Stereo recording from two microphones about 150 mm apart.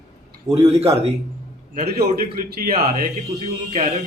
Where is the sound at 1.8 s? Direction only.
90° right; by 3.1 s 70° right (ahead or behind).